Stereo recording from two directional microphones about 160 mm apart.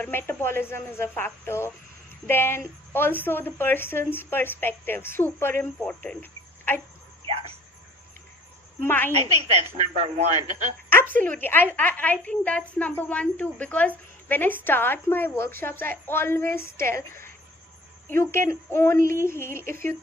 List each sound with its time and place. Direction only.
0.0 s a woman's voice: 15° left (ahead or behind)
8.8 s a woman's voice: 15° left (ahead or behind)
9.1 s speech: 45° right (ahead or behind)
10.8 s a woman's voice: 10° left (ahead or behind)